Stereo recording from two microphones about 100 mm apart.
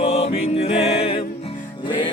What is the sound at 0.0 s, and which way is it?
Music, 85° left.